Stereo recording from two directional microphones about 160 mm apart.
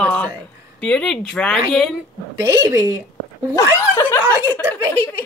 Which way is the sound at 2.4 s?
20° right (ahead or behind).